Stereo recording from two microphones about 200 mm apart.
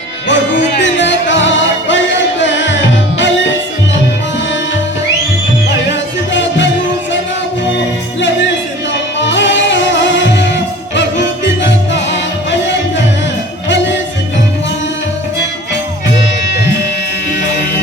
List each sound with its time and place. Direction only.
0.3 s music: 65° left (ahead or behind)
6.3 s music: 65° left (ahead or behind)
9.2 s music: 65° left (ahead or behind)
11.6 s music: 65° left (ahead or behind)